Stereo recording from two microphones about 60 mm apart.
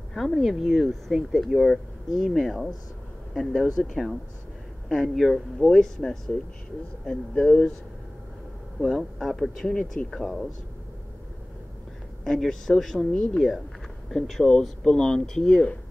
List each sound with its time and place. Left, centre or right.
0.1 s speech: centre
3.7 s speech: centre
8.7 s speech: centre
12.3 s speech: centre